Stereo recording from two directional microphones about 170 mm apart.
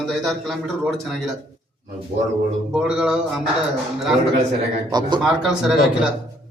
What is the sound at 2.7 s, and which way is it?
Speech, 5° right (ahead or behind).